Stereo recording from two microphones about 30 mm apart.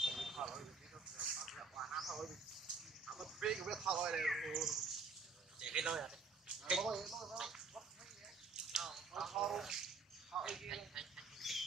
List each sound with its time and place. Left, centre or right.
0.0 s a sound: centre
3.4 s a man's voice: centre
4.2 s speech: centre
5.6 s speech: right
7.0 s speech: centre
7.3 s a sound: centre
11.3 s pig: centre